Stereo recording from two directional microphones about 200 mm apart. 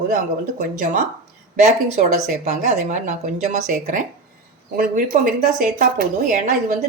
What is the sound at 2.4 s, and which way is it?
Speech, 35° right (ahead or behind).